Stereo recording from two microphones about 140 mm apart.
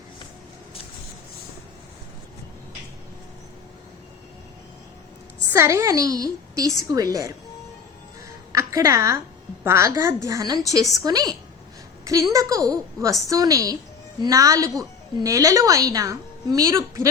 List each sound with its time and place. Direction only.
5.5 s a woman's voice: 20° right (ahead or behind)
8.5 s a woman's voice: 25° right (ahead or behind)